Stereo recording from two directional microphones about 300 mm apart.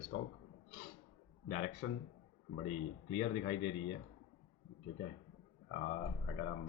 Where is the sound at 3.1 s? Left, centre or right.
Left.